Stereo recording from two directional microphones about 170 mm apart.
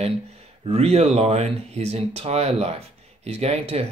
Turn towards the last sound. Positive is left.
turn(degrees=-35)  # may be behind; listen again after turning